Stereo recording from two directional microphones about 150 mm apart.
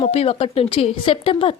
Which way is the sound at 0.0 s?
40° left (ahead or behind).